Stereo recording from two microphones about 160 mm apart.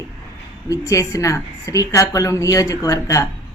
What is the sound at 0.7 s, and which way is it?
A woman's voice, 20° left (ahead or behind).